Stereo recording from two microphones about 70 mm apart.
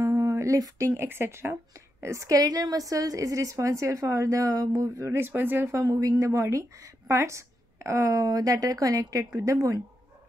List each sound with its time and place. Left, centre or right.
0.0 s speech: right
5.7 s speech: right